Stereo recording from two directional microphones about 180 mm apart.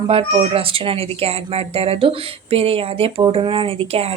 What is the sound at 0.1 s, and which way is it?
Speech, 30° right (ahead or behind).